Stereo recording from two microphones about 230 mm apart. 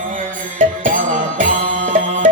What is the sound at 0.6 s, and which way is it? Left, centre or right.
Music, right.